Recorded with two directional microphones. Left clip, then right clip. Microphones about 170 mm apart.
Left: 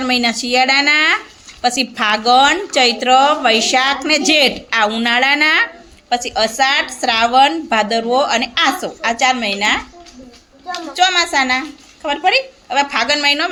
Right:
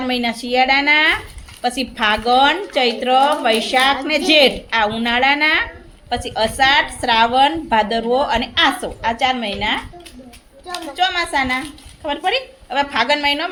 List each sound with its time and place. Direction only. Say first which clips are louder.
0.0 s a woman's voice: left 4 dB; 15° left (ahead or behind)
10.9 s a woman's voice: left 4 dB; 15° left (ahead or behind)